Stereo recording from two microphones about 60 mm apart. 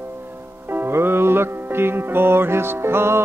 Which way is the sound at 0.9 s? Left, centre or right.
Right.